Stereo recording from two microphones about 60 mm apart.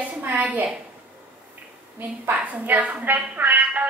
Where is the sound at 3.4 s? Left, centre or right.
Right.